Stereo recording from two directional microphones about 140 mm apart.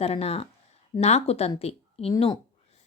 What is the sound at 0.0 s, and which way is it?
A woman's voice, 45° left (ahead or behind).